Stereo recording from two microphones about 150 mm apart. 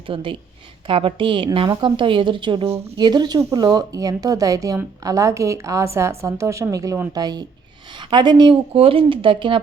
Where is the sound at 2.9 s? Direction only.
30° right (ahead or behind).